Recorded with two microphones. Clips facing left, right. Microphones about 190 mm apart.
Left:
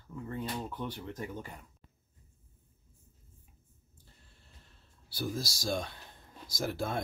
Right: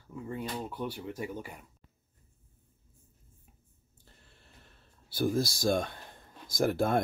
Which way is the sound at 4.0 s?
65° right (ahead or behind).